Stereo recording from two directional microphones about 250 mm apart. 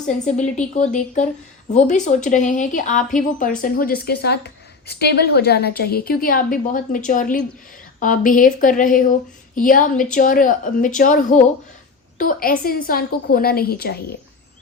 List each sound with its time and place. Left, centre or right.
0.0 s a woman's voice: left